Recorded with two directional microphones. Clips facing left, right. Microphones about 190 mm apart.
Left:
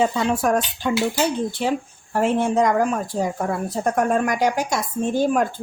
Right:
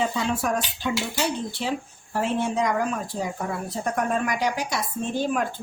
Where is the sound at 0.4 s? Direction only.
50° left (ahead or behind).